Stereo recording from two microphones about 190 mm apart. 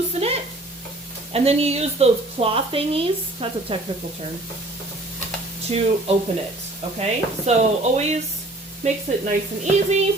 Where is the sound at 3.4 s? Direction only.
30° right (ahead or behind).